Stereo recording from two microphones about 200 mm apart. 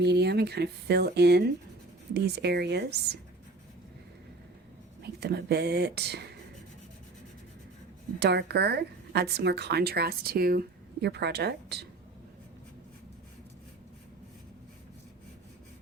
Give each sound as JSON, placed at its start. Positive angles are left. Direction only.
{"t": 0.0, "sound": "a woman's voice", "side_deg": -55}
{"t": 5.0, "sound": "a woman's voice", "side_deg": -55}
{"t": 8.2, "sound": "a woman's voice", "side_deg": -55}